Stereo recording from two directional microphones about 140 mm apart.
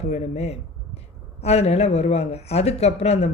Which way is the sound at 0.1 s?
50° left (ahead or behind).